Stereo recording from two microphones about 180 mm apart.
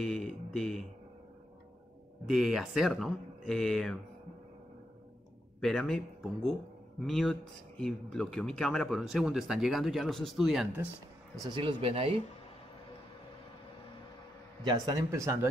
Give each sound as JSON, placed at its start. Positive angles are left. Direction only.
{"t": 0.0, "sound": "speech", "side_deg": 0}
{"t": 2.2, "sound": "speech", "side_deg": 0}
{"t": 5.6, "sound": "speech", "side_deg": 5}
{"t": 11.3, "sound": "speech", "side_deg": -25}
{"t": 14.6, "sound": "a man's voice", "side_deg": -20}